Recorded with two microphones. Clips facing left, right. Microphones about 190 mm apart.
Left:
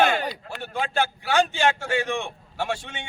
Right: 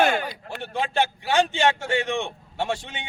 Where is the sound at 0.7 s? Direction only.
25° right (ahead or behind).